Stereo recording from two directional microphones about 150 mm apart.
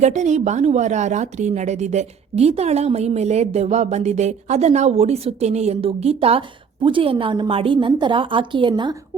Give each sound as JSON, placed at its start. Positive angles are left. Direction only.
{"t": 0.0, "sound": "a woman's voice", "side_deg": -50}